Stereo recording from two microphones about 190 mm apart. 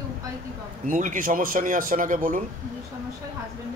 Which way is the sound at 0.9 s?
45° right (ahead or behind).